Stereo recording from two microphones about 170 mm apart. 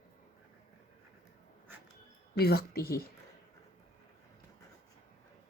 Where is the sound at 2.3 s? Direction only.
65° left (ahead or behind).